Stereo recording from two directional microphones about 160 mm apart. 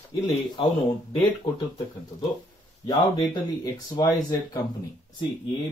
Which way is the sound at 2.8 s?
25° left (ahead or behind).